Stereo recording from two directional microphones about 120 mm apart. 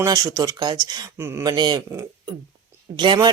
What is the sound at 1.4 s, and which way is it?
Speech, 40° right (ahead or behind).